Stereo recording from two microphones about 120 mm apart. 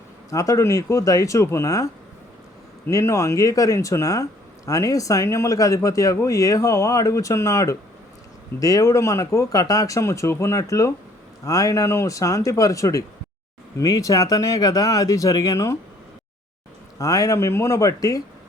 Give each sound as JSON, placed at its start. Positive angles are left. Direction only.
{"t": 0.3, "sound": "speech", "side_deg": 25}
{"t": 17.0, "sound": "speech", "side_deg": 30}